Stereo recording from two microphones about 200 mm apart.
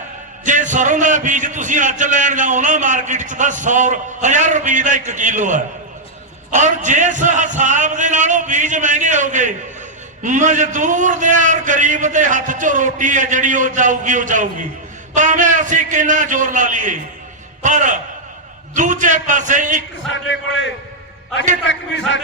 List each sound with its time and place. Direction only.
0.4 s a man's voice: 40° right (ahead or behind)
20.1 s a man's voice: 70° left (ahead or behind)